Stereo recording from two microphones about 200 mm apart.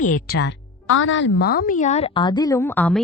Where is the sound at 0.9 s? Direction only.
85° left.